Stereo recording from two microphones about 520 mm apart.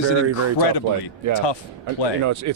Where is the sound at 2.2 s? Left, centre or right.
Right.